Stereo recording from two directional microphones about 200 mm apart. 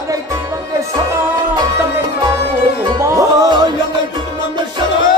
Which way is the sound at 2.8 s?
20° right (ahead or behind).